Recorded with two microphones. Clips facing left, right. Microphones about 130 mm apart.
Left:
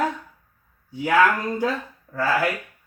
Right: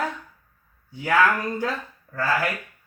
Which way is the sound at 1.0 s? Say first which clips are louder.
Left 2 dB; 20° left (ahead or behind).